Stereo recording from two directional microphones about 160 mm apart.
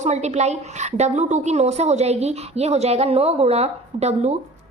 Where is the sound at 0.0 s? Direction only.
45° right (ahead or behind).